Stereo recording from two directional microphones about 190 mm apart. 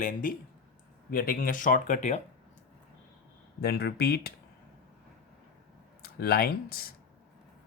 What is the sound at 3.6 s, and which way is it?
Speech, 55° left (ahead or behind).